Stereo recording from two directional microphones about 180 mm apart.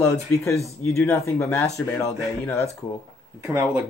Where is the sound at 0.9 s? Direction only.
15° left (ahead or behind).